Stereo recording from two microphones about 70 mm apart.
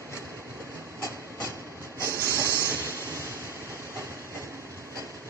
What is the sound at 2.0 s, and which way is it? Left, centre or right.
Train, right.